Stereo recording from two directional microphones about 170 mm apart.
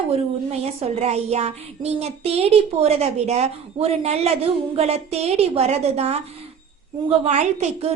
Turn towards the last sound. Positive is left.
turn(degrees=-40)  # may be behind; listen again after turning